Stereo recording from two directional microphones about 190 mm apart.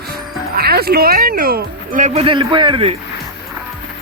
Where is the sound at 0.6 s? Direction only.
55° right (ahead or behind); by 2.9 s 30° right (ahead or behind).